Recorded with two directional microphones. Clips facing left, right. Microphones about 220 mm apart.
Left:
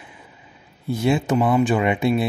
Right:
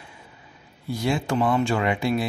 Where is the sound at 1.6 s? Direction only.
20° left (ahead or behind).